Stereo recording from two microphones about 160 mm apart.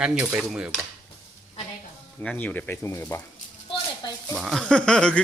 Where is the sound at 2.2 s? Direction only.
10° left (ahead or behind).